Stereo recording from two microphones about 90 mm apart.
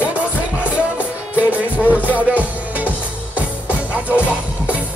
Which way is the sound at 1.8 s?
20° left (ahead or behind).